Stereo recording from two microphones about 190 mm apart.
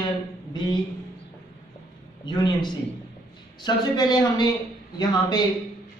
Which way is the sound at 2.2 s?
25° left (ahead or behind).